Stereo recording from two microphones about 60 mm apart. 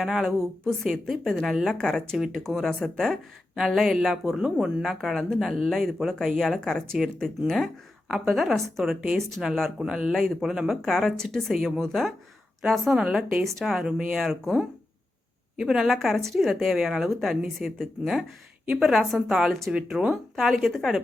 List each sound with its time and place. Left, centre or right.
0.0 s a woman's voice: centre
1.9 s speech: centre
2.1 s a woman's voice: centre
6.6 s a woman's voice: centre
8.0 s a woman's voice: centre
9.8 s a woman's voice: centre
10.8 s a woman's voice: centre
15.5 s speech: centre
15.9 s a woman's voice: centre